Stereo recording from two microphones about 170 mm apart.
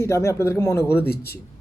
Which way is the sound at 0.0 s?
15° left (ahead or behind).